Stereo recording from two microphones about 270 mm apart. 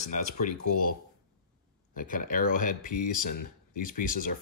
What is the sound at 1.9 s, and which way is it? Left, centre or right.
Speech, left.